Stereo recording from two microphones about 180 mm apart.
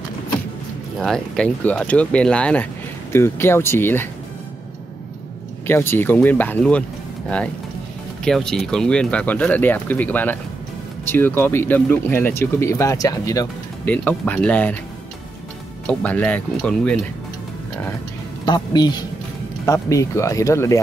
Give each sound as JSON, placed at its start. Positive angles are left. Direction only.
{"t": 0.9, "sound": "speech", "side_deg": 0}
{"t": 5.7, "sound": "speech", "side_deg": 10}
{"t": 8.2, "sound": "speech", "side_deg": 5}
{"t": 13.9, "sound": "speech", "side_deg": 10}
{"t": 15.9, "sound": "speech", "side_deg": 10}
{"t": 18.4, "sound": "speech", "side_deg": 25}